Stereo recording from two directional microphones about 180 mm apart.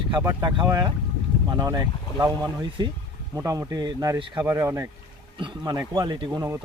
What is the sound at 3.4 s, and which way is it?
Speech, 20° right (ahead or behind).